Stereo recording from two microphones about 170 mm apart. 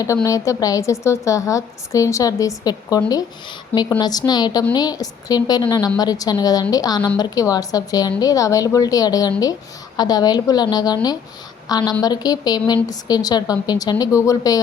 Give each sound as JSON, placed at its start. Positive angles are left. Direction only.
{"t": 0.0, "sound": "a woman's voice", "side_deg": 20}